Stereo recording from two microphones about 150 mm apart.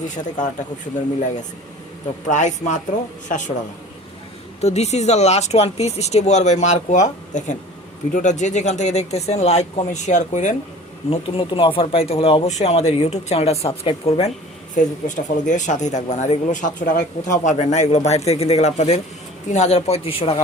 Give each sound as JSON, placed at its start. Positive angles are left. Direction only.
{"t": 2.2, "sound": "a woman's voice", "side_deg": 55}
{"t": 4.6, "sound": "speech", "side_deg": 45}
{"t": 11.1, "sound": "speech", "side_deg": 40}
{"t": 14.8, "sound": "speech", "side_deg": 55}